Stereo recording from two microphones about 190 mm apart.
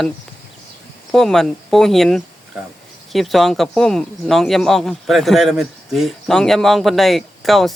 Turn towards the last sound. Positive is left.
turn(degrees=0)  # may be behind; listen again after turning